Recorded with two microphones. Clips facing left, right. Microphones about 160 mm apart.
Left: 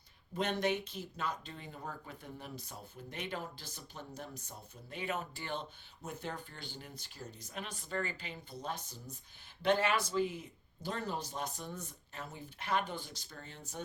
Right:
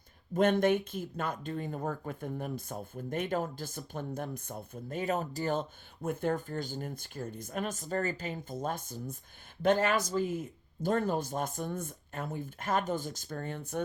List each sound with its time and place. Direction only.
0.3 s speech: 50° right (ahead or behind)